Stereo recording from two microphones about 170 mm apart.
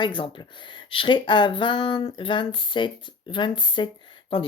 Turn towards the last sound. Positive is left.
turn(degrees=30)  # may be behind; listen again after turning